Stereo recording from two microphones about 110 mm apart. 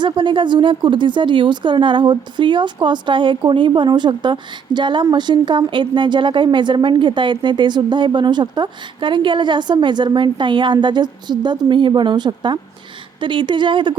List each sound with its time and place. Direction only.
0.0 s a woman's voice: 45° right (ahead or behind)